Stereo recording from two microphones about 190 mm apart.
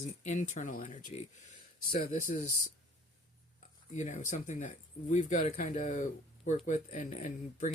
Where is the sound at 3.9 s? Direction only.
40° left (ahead or behind).